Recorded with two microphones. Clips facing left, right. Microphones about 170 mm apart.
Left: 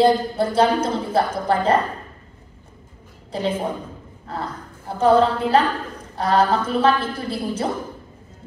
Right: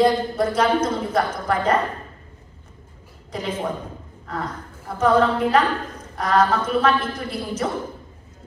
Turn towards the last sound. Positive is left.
turn(degrees=30)  # may be behind; listen again after turning